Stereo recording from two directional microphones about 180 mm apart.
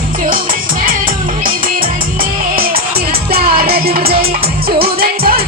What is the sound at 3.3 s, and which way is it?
Music, 55° right (ahead or behind).